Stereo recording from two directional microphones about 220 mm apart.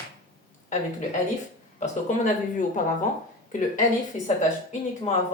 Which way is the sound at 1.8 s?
35° left (ahead or behind).